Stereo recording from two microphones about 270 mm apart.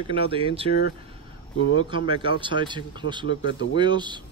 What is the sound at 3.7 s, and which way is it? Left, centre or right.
Speech, centre.